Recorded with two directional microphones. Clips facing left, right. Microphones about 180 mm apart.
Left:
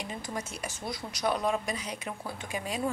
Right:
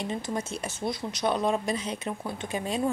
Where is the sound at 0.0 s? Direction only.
25° right (ahead or behind).